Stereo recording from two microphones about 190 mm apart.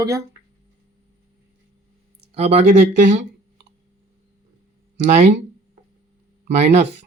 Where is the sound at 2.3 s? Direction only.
35° right (ahead or behind).